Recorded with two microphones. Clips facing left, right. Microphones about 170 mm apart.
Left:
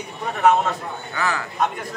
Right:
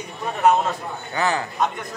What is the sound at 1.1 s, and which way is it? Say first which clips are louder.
Speech: right 3 dB; 25° right (ahead or behind).